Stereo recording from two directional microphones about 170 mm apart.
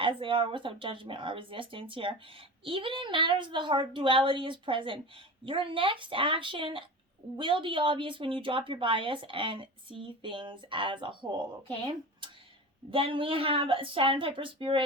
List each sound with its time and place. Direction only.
0.0 s a woman's voice: 30° right (ahead or behind)
12.2 s a sound: 30° right (ahead or behind)
12.9 s speech: 30° right (ahead or behind)